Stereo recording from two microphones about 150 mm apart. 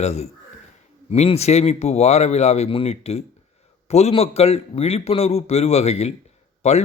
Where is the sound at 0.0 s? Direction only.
45° left (ahead or behind).